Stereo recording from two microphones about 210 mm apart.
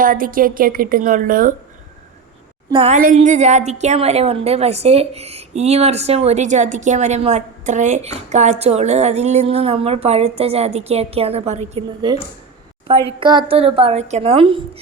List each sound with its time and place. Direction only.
0.0 s a woman's voice: 40° right (ahead or behind)
2.6 s a woman's voice: 25° right (ahead or behind)
3.0 s a woman's voice: 40° right (ahead or behind)
13.1 s a woman's voice: 25° right (ahead or behind)